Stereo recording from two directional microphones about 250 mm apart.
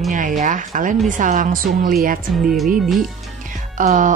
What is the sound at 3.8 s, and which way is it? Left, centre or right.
Speech, right.